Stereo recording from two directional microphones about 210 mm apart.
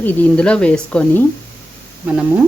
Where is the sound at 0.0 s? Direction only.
10° left (ahead or behind).